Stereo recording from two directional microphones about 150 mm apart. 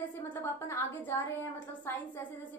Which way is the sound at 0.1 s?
15° left (ahead or behind).